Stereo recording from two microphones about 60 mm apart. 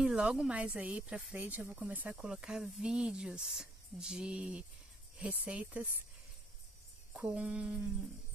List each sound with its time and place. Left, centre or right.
0.0 s speech: centre
1.3 s speech: right
2.1 s speech: centre
7.2 s speech: centre